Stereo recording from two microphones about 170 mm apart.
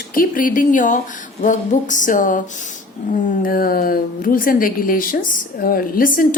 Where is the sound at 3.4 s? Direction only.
60° left (ahead or behind).